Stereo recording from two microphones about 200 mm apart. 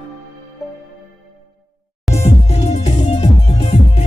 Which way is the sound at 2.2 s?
35° left (ahead or behind).